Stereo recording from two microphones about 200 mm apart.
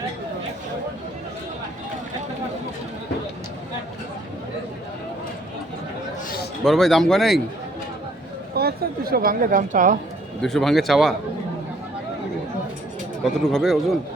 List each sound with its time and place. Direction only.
6.7 s speech: centre (ahead or behind)
8.5 s speech: 50° right (ahead or behind)
10.4 s speech: centre (ahead or behind)
13.2 s speech: centre (ahead or behind)